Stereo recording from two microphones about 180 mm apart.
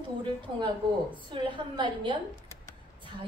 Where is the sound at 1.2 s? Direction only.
25° right (ahead or behind).